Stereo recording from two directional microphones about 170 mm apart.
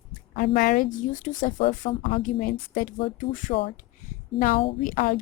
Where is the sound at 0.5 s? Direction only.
55° left (ahead or behind).